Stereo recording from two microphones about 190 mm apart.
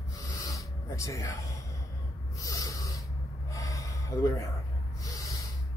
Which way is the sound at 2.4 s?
15° left (ahead or behind).